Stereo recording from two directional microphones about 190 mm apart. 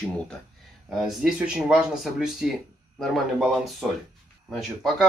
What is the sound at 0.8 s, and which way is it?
Speech, centre (ahead or behind).